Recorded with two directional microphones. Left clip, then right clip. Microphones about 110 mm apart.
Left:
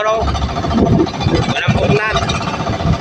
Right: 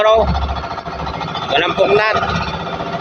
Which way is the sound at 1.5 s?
15° left (ahead or behind).